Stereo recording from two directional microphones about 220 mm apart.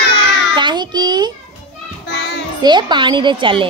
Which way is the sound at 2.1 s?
50° left (ahead or behind).